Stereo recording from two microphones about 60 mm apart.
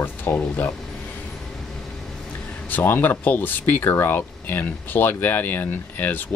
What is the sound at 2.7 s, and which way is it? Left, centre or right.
Speech, left.